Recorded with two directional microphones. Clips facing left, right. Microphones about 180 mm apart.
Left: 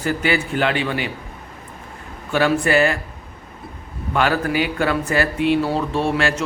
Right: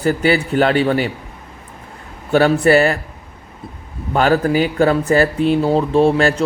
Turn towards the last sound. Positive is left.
turn(degrees=-35)  # may be behind; listen again after turning